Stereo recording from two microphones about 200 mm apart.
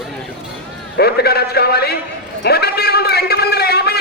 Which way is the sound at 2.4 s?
55° left (ahead or behind).